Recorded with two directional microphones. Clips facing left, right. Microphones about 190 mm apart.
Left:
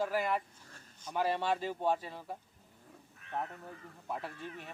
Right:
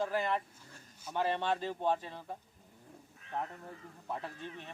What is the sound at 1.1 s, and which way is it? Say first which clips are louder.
A man's voice: left 1 dB; 10° left (ahead or behind).